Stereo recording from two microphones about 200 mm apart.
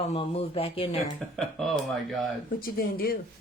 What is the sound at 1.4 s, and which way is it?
Speech, centre (ahead or behind).